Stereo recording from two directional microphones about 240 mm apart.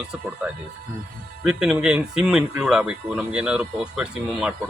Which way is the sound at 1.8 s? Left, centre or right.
Centre.